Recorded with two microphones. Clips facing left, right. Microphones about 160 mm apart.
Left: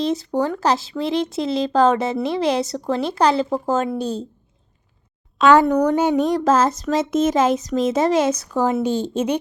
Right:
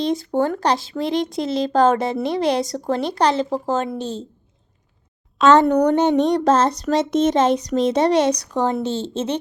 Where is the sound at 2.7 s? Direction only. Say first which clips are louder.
Even; 35° right (ahead or behind).